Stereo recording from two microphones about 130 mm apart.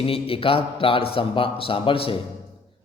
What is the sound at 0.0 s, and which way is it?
A man's voice, 45° left (ahead or behind).